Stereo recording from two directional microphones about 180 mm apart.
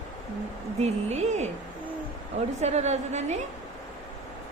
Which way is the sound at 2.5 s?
40° right (ahead or behind).